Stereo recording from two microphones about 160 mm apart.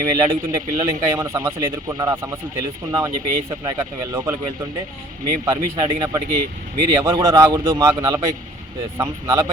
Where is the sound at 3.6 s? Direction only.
20° right (ahead or behind).